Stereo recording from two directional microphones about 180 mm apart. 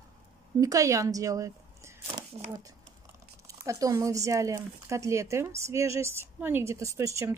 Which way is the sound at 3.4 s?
20° right (ahead or behind).